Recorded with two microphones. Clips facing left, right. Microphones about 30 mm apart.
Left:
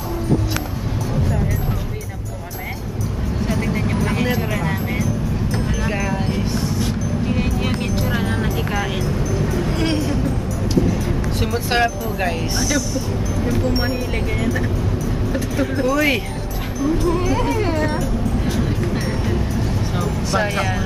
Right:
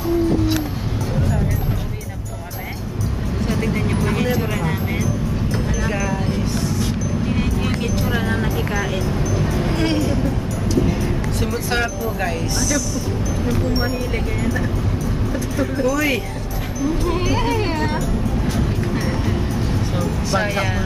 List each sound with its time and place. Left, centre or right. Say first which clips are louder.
3.4 s vehicle: right 1 dB; centre
5.9 s music: even; left
6.8 s music: even; centre
11.7 s speech: left 5 dB; centre
15.8 s speech: left 1 dB; left
17.5 s music: left 1 dB; right
20.0 s music: left 1 dB; centre